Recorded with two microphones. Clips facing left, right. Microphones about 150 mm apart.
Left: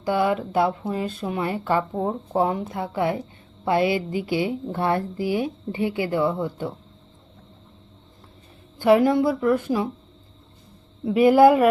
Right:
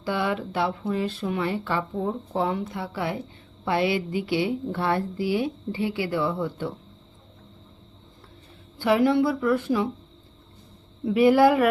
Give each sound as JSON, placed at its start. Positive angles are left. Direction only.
{"t": 0.0, "sound": "speech", "side_deg": 40}
{"t": 2.7, "sound": "speech", "side_deg": 20}
{"t": 3.7, "sound": "a woman's voice", "side_deg": 45}
{"t": 6.1, "sound": "a woman's voice", "side_deg": 15}
{"t": 9.0, "sound": "a woman's voice", "side_deg": 45}
{"t": 9.5, "sound": "a woman's voice", "side_deg": 15}
{"t": 11.0, "sound": "speech", "side_deg": 25}